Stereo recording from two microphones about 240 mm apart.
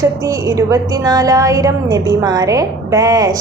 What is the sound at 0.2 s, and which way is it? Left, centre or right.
A woman's voice, centre.